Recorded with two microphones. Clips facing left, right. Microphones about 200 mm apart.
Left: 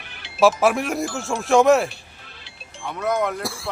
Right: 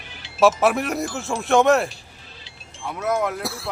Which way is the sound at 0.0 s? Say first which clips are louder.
Right 1 dB; 60° left (ahead or behind).